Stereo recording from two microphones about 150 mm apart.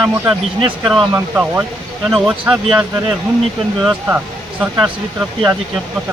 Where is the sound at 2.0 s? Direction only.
Centre (ahead or behind).